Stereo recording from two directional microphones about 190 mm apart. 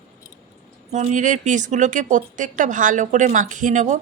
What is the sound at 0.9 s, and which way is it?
Speech, 40° right (ahead or behind).